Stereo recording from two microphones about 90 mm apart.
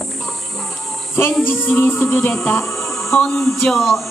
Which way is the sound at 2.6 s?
5° left (ahead or behind).